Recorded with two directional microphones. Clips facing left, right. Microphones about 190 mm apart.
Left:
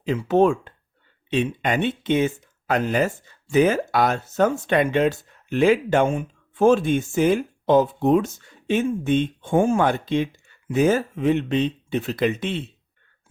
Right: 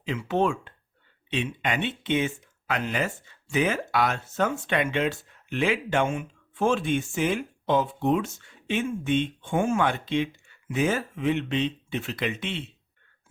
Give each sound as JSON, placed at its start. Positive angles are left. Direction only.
{"t": 0.0, "sound": "speech", "side_deg": 40}